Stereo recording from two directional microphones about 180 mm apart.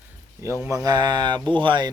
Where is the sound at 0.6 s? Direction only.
20° right (ahead or behind).